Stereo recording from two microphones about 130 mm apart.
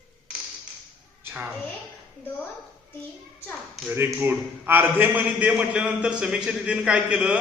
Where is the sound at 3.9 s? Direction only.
20° right (ahead or behind).